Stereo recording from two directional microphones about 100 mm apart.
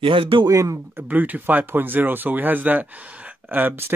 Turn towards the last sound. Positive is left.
turn(degrees=-20)  # may be behind; listen again after turning